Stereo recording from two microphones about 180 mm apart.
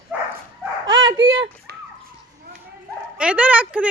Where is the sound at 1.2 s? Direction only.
90° right.